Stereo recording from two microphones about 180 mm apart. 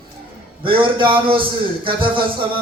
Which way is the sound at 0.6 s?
30° right (ahead or behind).